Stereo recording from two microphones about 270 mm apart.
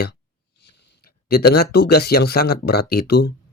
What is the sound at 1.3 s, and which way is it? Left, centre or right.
Speech, left.